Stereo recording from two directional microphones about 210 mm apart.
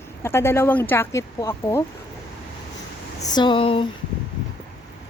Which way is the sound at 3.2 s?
20° left (ahead or behind).